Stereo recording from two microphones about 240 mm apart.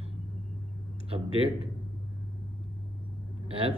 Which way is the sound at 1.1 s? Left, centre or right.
Right.